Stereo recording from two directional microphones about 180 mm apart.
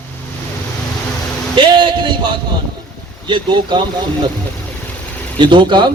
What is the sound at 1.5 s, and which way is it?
Speech, 25° right (ahead or behind).